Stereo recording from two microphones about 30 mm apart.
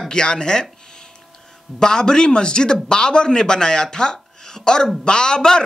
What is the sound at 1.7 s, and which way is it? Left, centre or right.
Speech, left.